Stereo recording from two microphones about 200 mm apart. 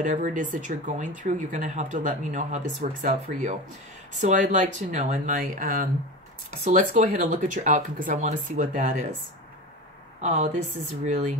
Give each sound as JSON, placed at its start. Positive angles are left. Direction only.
{"t": 0.0, "sound": "speech", "side_deg": -40}
{"t": 10.2, "sound": "speech", "side_deg": -35}